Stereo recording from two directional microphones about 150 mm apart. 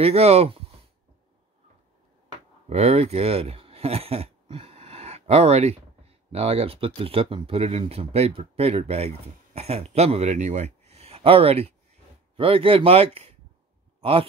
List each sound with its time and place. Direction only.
0.0 s speech: 45° right (ahead or behind)
2.7 s speech: 50° right (ahead or behind)